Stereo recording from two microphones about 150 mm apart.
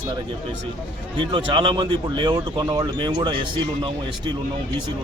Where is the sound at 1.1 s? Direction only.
35° right (ahead or behind).